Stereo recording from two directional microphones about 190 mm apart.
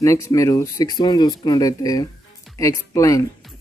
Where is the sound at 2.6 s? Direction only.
15° left (ahead or behind).